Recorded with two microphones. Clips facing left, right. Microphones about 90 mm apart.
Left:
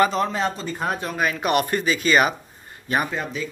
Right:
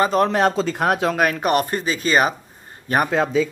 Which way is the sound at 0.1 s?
60° right (ahead or behind).